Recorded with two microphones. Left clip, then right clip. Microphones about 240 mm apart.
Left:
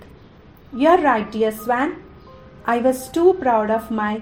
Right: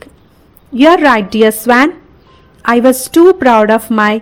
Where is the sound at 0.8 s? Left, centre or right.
Right.